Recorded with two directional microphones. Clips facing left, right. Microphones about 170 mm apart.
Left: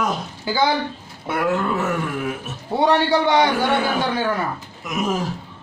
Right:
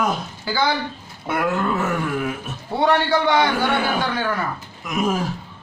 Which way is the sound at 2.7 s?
15° left (ahead or behind).